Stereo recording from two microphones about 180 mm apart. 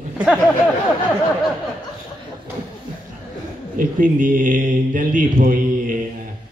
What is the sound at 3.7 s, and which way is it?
A man's voice, 45° right (ahead or behind).